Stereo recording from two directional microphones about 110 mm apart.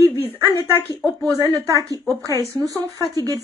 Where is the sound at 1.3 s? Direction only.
30° right (ahead or behind).